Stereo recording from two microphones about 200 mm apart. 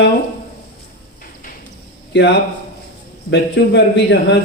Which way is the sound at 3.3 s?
60° left (ahead or behind).